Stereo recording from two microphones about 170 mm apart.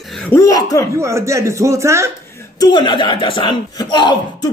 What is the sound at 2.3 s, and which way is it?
Chuckle, 15° left (ahead or behind).